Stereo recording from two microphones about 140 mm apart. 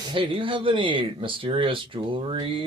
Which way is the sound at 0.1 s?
35° right (ahead or behind).